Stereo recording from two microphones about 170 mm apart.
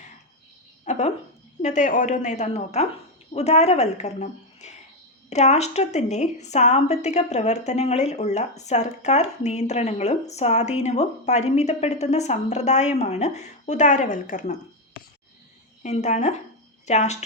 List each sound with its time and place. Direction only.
0.9 s a sound: 40° left (ahead or behind)
1.6 s a woman's voice: 45° left (ahead or behind)
15.8 s speech: 45° left (ahead or behind)